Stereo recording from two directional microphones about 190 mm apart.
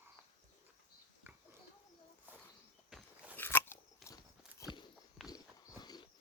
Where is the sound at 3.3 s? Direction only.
10° left (ahead or behind).